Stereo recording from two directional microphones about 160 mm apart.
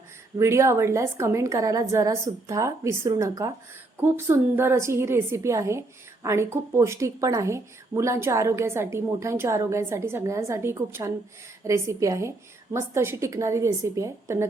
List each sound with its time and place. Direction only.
0.3 s a woman's voice: 15° right (ahead or behind)